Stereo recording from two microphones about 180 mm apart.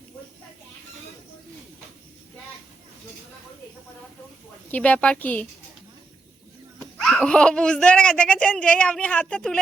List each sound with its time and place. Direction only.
4.7 s a woman's voice: 5° left (ahead or behind)
7.0 s speech: 5° left (ahead or behind)